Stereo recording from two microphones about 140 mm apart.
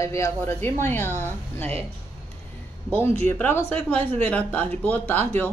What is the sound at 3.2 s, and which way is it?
Speech, 15° left (ahead or behind).